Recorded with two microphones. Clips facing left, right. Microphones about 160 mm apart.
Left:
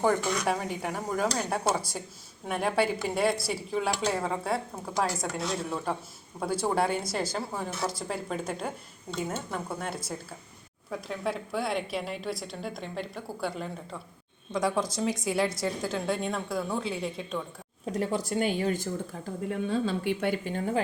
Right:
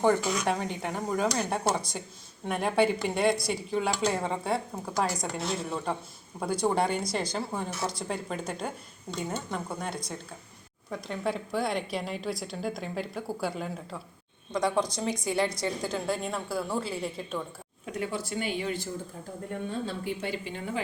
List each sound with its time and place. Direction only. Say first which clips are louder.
0.0 s speech: right 1 dB; centre (ahead or behind)
17.8 s a woman's voice: left 4 dB; 40° left (ahead or behind)
19.8 s speech: left 5 dB; 80° left; by 20.8 s 50° left (ahead or behind)